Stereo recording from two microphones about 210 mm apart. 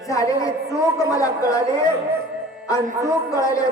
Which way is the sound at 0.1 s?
15° left (ahead or behind).